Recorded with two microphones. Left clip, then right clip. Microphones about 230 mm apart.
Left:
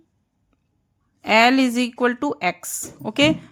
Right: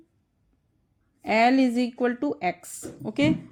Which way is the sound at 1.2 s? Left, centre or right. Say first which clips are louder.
Left 5 dB; centre.